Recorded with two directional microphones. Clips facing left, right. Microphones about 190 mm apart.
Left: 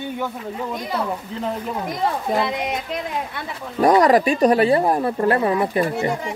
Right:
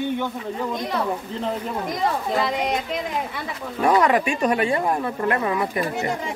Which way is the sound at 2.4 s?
Centre (ahead or behind).